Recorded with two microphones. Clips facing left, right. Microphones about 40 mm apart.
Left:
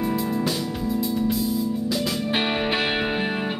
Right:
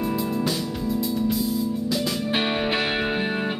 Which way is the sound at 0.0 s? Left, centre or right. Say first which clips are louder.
Left 1 dB; centre.